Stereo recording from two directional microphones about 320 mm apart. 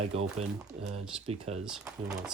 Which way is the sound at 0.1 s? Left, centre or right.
Centre.